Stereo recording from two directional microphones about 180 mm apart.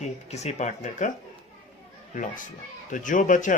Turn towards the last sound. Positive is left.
turn(degrees=45)  # may be behind; listen again after turning